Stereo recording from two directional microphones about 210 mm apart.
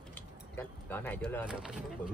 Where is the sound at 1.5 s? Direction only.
5° right (ahead or behind).